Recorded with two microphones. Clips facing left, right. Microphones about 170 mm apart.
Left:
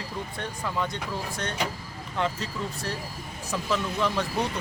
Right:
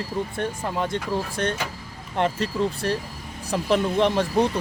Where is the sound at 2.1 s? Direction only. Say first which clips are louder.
Right 6 dB; 60° right (ahead or behind).